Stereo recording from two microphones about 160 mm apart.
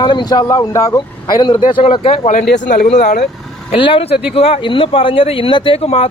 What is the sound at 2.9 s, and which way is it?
Speech, 45° left (ahead or behind).